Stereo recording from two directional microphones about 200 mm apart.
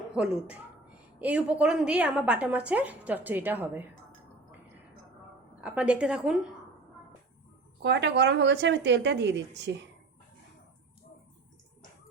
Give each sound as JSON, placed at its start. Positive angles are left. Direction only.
{"t": 0.1, "sound": "a woman's voice", "side_deg": -5}
{"t": 5.5, "sound": "a woman's voice", "side_deg": -5}
{"t": 7.8, "sound": "speech", "side_deg": -60}